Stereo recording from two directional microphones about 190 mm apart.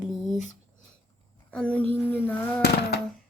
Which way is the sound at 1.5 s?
5° left (ahead or behind).